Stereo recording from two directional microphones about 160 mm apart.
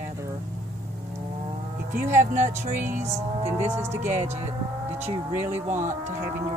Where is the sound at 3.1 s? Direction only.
15° right (ahead or behind).